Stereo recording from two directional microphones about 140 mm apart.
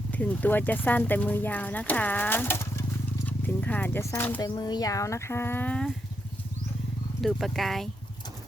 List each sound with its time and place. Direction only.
0.1 s speech: 10° left (ahead or behind)
4.4 s speech: 30° left (ahead or behind); by 5.9 s 10° left (ahead or behind)
7.2 s speech: centre (ahead or behind)